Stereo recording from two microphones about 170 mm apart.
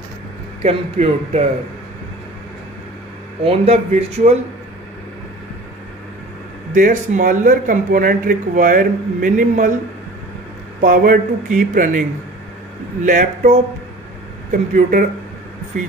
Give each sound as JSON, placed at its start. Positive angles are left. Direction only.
{"t": 0.6, "sound": "a man's voice", "side_deg": -40}
{"t": 3.4, "sound": "a man's voice", "side_deg": -40}
{"t": 6.7, "sound": "speech", "side_deg": -50}
{"t": 10.8, "sound": "speech", "side_deg": -55}
{"t": 13.0, "sound": "speech", "side_deg": -50}
{"t": 14.7, "sound": "speech", "side_deg": -55}